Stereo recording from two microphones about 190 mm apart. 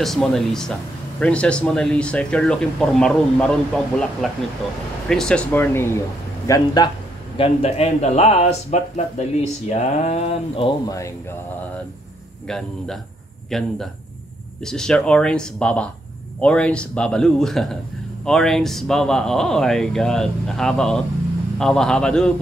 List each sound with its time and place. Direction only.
0.0 s speech: centre (ahead or behind); by 6.9 s 20° left (ahead or behind)
7.3 s speech: 30° left (ahead or behind)
10.9 s speech: 15° left (ahead or behind)
12.4 s speech: 5° left (ahead or behind)